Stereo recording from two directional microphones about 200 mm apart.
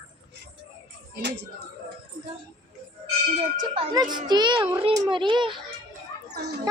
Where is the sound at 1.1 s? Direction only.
60° right (ahead or behind).